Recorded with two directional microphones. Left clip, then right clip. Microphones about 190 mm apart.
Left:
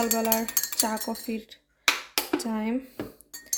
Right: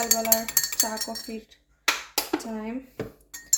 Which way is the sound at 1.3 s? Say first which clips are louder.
Left 3 dB; 60° left (ahead or behind).